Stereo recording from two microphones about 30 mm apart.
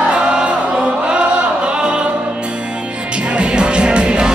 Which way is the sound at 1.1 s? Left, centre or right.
Right.